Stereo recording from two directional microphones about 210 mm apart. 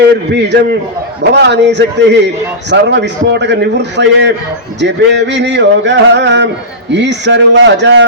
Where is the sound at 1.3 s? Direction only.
55° right (ahead or behind).